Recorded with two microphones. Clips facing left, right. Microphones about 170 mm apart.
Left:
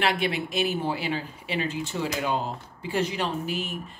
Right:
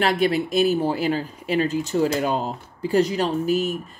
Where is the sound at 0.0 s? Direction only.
40° right (ahead or behind).